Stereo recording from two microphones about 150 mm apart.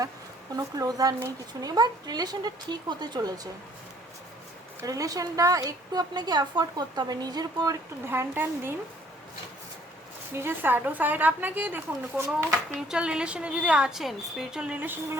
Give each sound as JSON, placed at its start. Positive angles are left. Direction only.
{"t": 0.5, "sound": "a woman's voice", "side_deg": -25}
{"t": 4.8, "sound": "a woman's voice", "side_deg": -25}
{"t": 10.3, "sound": "a woman's voice", "side_deg": -15}